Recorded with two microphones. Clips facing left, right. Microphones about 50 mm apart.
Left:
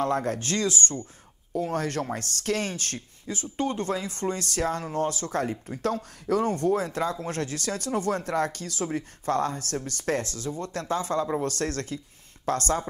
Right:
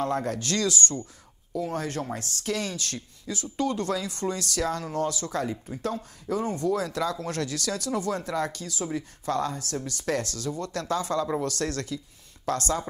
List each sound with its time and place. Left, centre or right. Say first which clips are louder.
0.0 s speech: left 2 dB; left
1.5 s speech: left 2 dB; left
10.1 s speech: even; left